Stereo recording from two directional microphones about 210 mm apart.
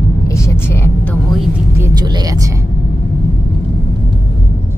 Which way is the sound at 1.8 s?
20° right (ahead or behind).